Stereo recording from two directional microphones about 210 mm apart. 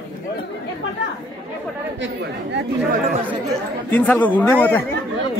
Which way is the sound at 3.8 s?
10° left (ahead or behind).